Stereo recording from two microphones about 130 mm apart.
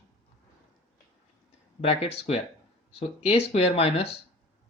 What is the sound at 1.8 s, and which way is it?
Speech, 50° left (ahead or behind).